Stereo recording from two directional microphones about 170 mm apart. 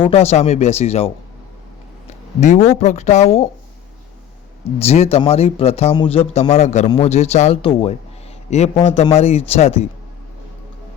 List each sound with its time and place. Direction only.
0.0 s speech: 35° left (ahead or behind)
4.8 s speech: 35° left (ahead or behind)